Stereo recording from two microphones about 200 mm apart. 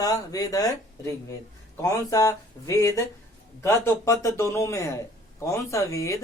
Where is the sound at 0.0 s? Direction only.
15° left (ahead or behind).